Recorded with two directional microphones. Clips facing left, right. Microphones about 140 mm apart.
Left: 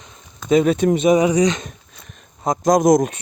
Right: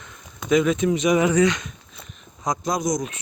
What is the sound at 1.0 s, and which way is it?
Speech, 25° left (ahead or behind).